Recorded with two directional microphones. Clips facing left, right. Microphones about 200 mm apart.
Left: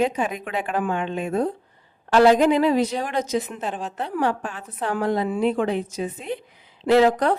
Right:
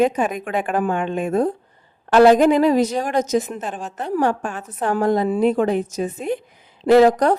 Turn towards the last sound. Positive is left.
turn(degrees=-45)  # may be behind; listen again after turning